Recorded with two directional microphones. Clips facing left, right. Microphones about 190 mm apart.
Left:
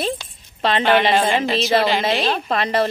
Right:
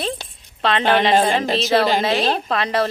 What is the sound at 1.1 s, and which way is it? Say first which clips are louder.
Speech: right 1 dB; 40° right (ahead or behind).